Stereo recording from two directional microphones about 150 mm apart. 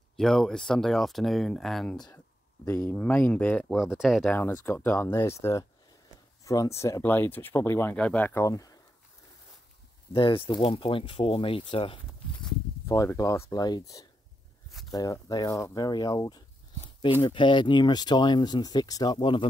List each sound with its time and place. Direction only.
0.1 s speech: centre (ahead or behind)
2.0 s speech: 20° left (ahead or behind)
3.7 s speech: 5° right (ahead or behind)
4.3 s speech: 10° left (ahead or behind)
10.1 s speech: 35° left (ahead or behind)
12.8 s speech: 20° left (ahead or behind)